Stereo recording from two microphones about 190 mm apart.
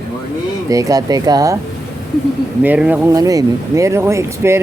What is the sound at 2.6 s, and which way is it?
Speech, 5° right (ahead or behind).